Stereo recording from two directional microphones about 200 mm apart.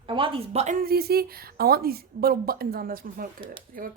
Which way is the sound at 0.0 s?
25° right (ahead or behind).